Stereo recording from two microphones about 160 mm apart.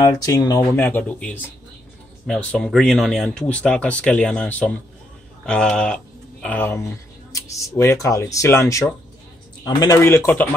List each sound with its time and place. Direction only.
0.0 s speech: 20° left (ahead or behind)